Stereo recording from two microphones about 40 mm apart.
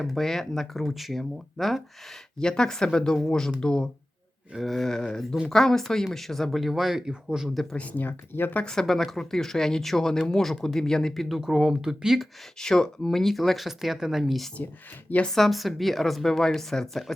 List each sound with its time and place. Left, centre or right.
0.0 s speech: centre
2.4 s speech: centre
4.5 s speech: centre
7.5 s speech: centre
7.8 s speech: left
8.6 s speech: left
8.9 s speech: centre
11.3 s speech: centre
12.5 s speech: centre